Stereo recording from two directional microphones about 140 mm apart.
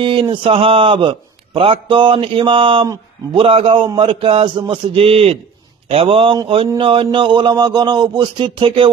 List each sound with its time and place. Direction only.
0.0 s a man's voice: 35° right (ahead or behind)